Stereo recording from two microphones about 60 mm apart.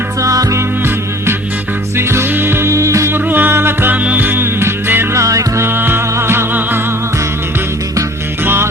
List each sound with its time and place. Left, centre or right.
0.2 s music: right
2.0 s music: right
3.1 s music: right
3.9 s music: right
5.1 s music: right
5.6 s music: right